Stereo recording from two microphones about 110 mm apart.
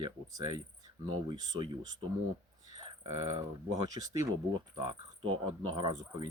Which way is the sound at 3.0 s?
70° right (ahead or behind).